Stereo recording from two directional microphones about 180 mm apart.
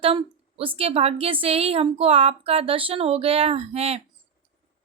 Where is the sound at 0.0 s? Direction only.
30° right (ahead or behind).